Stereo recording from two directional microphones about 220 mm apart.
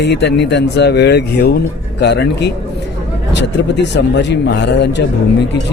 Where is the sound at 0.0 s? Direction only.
50° left (ahead or behind).